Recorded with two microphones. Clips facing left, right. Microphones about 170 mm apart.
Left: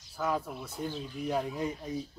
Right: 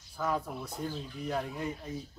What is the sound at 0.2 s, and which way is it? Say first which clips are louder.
Speech: left 1 dB; 5° left (ahead or behind).